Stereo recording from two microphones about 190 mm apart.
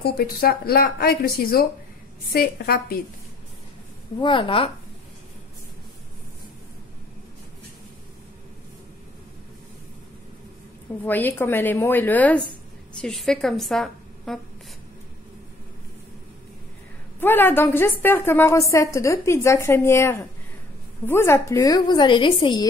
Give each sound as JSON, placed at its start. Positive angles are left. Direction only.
{"t": 0.0, "sound": "speech", "side_deg": 55}
{"t": 4.2, "sound": "a woman's voice", "side_deg": 25}
{"t": 11.1, "sound": "a woman's voice", "side_deg": 10}
{"t": 17.2, "sound": "a woman's voice", "side_deg": 10}